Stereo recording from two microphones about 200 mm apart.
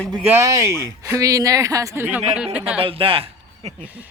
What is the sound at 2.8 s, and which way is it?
Speech, 25° right (ahead or behind).